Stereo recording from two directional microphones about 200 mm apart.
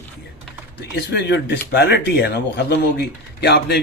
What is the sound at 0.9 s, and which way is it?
Speech, 60° left (ahead or behind).